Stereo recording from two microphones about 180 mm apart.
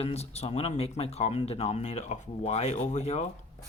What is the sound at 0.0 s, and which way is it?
Speech, 35° left (ahead or behind).